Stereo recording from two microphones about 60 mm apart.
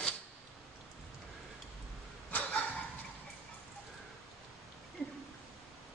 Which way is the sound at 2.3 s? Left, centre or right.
Left.